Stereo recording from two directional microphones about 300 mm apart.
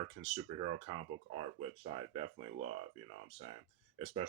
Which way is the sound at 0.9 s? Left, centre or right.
Centre.